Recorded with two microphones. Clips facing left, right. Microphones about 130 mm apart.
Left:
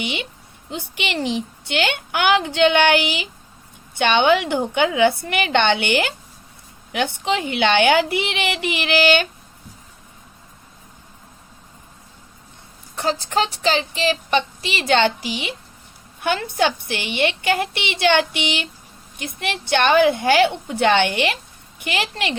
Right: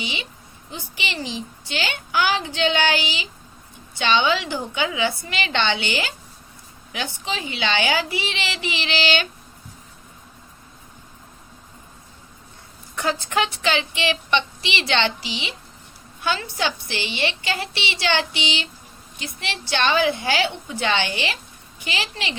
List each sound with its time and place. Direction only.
0.0 s a woman's voice: 60° left (ahead or behind)
13.0 s a woman's voice: 30° left (ahead or behind); by 22.4 s 55° left (ahead or behind)